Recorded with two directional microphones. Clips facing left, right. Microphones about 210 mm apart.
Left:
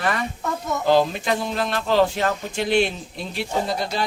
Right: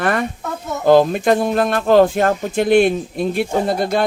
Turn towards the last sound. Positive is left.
turn(degrees=-55)  # may be behind; listen again after turning